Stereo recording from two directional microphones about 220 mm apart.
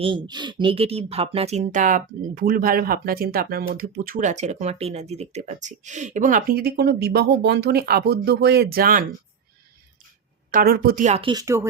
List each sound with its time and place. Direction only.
0.3 s speech: 20° right (ahead or behind); by 9.0 s 40° right (ahead or behind)
10.5 s speech: 45° right (ahead or behind); by 11.6 s 15° right (ahead or behind)